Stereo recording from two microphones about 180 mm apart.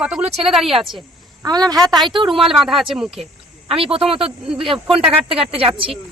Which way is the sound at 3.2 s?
30° right (ahead or behind).